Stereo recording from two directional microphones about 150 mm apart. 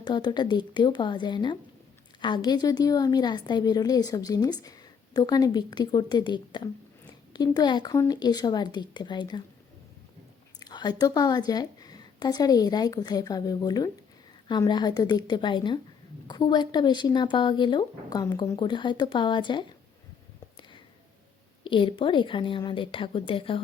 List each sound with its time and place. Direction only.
0.0 s a woman's voice: 30° left (ahead or behind)
10.6 s a woman's voice: 30° left (ahead or behind)
21.6 s speech: 35° left (ahead or behind)